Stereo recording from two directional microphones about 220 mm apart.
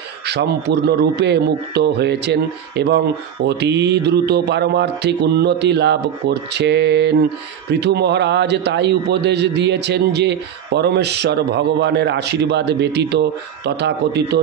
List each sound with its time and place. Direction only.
0.3 s a man's voice: 50° right (ahead or behind)